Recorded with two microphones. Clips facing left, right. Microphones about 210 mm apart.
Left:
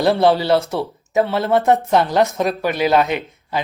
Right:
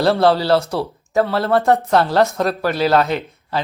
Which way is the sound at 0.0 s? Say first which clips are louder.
Even; 15° left (ahead or behind).